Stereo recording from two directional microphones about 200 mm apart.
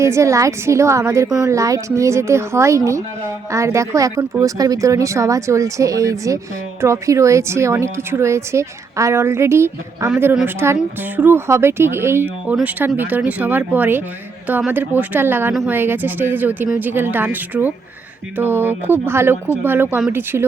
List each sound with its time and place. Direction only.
0.0 s speech: 15° right (ahead or behind)